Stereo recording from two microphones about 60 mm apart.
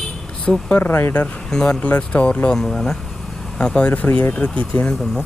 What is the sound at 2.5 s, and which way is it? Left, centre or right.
A man's voice, centre.